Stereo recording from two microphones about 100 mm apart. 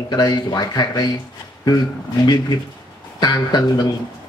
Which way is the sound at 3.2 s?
45° left (ahead or behind).